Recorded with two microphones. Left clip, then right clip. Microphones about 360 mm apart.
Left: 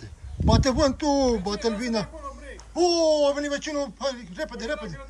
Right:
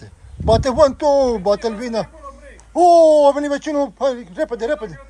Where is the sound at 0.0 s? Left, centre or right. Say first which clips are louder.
Right 7 dB; centre.